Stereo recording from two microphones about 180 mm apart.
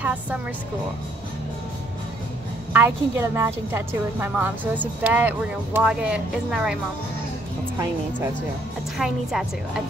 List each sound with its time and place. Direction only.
0.0 s speech: 10° right (ahead or behind)
2.7 s a woman's voice: 10° right (ahead or behind)
8.9 s a woman's voice: centre (ahead or behind)